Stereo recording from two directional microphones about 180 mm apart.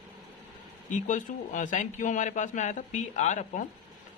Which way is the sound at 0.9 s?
45° left (ahead or behind).